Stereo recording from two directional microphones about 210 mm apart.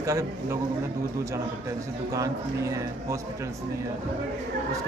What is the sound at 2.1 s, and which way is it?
Speech, 15° right (ahead or behind).